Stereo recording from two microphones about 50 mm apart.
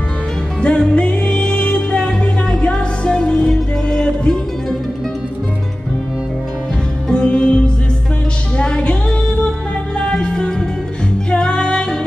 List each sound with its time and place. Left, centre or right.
0.6 s music: centre
7.1 s music: centre